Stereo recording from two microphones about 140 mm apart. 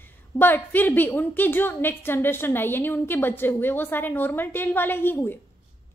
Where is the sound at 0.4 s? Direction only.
15° left (ahead or behind).